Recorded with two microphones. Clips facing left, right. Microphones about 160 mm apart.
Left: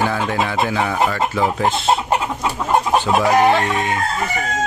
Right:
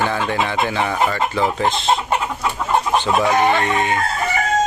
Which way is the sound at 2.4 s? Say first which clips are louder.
Left 1 dB; 10° left (ahead or behind).